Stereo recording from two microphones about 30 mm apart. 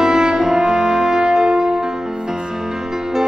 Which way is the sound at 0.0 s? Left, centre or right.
Right.